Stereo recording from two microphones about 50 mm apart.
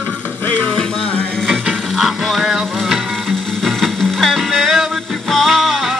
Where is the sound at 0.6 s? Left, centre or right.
Centre.